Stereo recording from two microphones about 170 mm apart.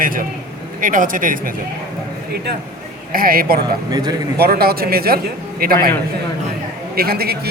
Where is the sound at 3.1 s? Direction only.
60° right (ahead or behind).